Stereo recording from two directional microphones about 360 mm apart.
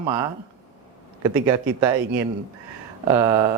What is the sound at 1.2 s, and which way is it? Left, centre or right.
Speech, centre.